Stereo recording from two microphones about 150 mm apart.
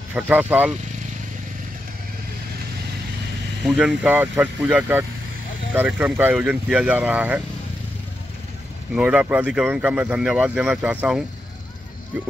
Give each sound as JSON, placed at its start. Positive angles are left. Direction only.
{"t": 0.1, "sound": "speech", "side_deg": -10}
{"t": 3.6, "sound": "speech", "side_deg": -5}
{"t": 8.9, "sound": "speech", "side_deg": -10}